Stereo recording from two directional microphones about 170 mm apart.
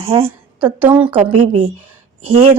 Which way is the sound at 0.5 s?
10° right (ahead or behind).